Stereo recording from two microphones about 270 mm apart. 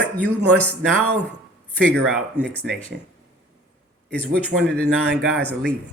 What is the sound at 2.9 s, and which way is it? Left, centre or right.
Speech, right.